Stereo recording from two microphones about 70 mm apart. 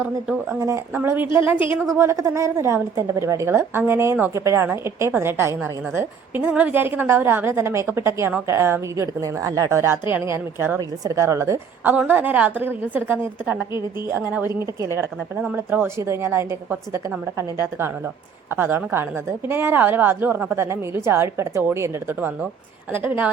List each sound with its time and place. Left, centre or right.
0.9 s a woman's voice: right
1.9 s a woman's voice: right
6.5 s a woman's voice: right
9.2 s speech: right
9.6 s a woman's voice: right
10.8 s a woman's voice: right
11.9 s a woman's voice: right
15.4 s a woman's voice: right
16.0 s a woman's voice: right